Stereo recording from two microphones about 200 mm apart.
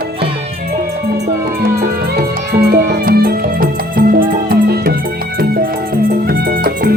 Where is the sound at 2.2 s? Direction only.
50° right (ahead or behind).